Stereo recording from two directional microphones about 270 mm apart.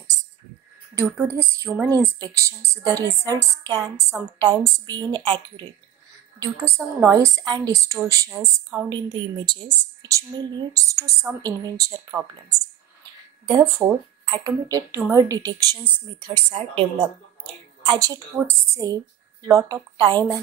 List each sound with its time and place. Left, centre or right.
0.9 s speech: centre
13.5 s speech: centre